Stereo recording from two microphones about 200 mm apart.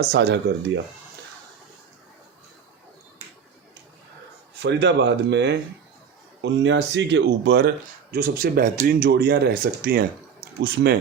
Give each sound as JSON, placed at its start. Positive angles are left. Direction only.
{"t": 0.0, "sound": "speech", "side_deg": -60}
{"t": 4.6, "sound": "speech", "side_deg": -60}